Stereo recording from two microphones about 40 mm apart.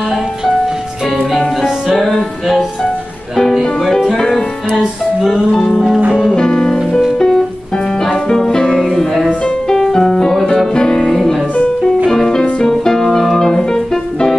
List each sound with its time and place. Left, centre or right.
4.2 s music: centre
4.7 s music: centre
6.3 s music: left
7.2 s music: centre
8.8 s music: centre
9.3 s music: left
9.8 s music: centre
11.1 s music: centre
12.1 s music: centre